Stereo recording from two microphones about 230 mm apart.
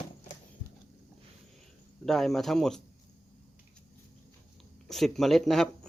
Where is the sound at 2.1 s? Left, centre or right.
Centre.